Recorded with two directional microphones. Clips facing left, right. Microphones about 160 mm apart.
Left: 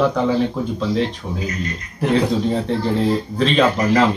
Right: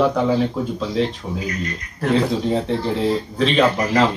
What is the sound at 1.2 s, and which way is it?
Speech, 5° right (ahead or behind).